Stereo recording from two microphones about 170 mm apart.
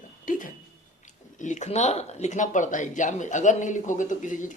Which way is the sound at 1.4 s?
45° left (ahead or behind).